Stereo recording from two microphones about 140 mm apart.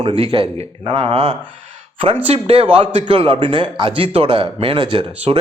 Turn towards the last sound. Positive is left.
turn(degrees=-35)  # may be behind; listen again after turning